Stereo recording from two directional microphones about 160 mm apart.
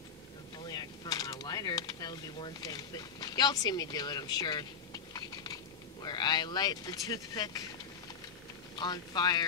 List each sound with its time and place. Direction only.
0.7 s speech: 25° left (ahead or behind)
8.7 s speech: 25° left (ahead or behind)